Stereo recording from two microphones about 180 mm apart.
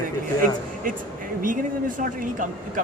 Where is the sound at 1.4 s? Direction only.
50° right (ahead or behind).